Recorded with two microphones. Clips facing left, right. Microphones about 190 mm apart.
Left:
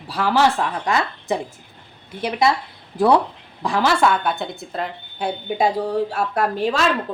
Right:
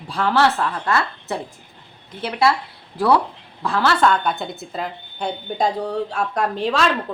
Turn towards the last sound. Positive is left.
turn(degrees=5)  # may be behind; listen again after turning